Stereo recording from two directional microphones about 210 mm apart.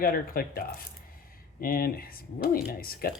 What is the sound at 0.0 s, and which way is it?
Speech, 45° left (ahead or behind).